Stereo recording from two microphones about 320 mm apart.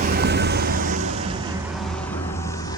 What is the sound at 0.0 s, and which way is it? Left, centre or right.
Vehicle, right.